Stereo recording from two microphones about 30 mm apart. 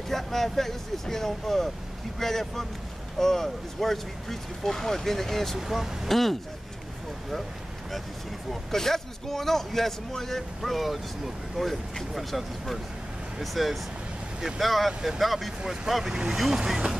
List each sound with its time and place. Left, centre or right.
0.1 s speech: centre
5.6 s speech: centre
6.0 s speech: centre
8.7 s speech: centre
14.9 s speech: centre
15.1 s speech: centre
15.6 s speech: right